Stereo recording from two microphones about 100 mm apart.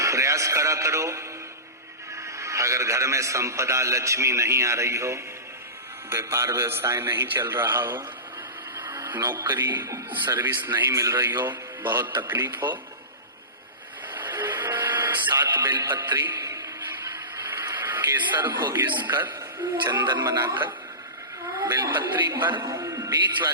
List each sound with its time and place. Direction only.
0.0 s a man's voice: 30° right (ahead or behind)
2.2 s a man's voice: 30° right (ahead or behind)
8.7 s a sound: 25° right (ahead or behind)
9.5 s a man's voice: 20° right (ahead or behind)
14.1 s printer: 20° right (ahead or behind)
15.4 s a man's voice: 20° right (ahead or behind)
16.1 s a sound: 30° right (ahead or behind)
19.8 s a man's voice: 20° right (ahead or behind)
21.7 s a man's voice: 25° right (ahead or behind)
22.6 s a man's voice: 35° right (ahead or behind)